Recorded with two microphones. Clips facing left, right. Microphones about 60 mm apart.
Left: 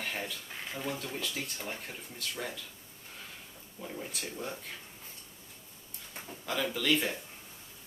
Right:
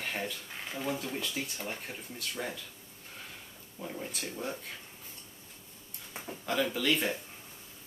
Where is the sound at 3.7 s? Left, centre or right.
Centre.